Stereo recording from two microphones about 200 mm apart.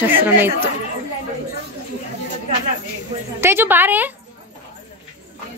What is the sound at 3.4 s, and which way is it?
Speech, 10° right (ahead or behind).